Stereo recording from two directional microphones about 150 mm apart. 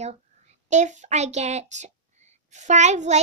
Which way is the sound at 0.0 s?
45° right (ahead or behind).